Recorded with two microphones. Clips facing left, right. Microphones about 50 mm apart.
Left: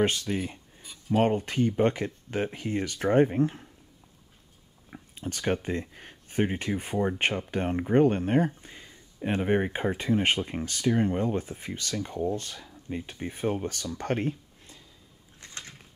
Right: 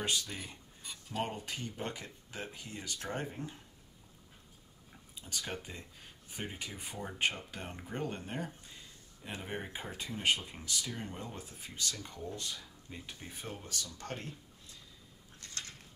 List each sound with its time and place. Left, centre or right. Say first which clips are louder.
0.0 s speech: left 10 dB; left
4.9 s speech: left 8 dB; left
12.1 s speech: left 12 dB; left
13.9 s a sound: left 14 dB; left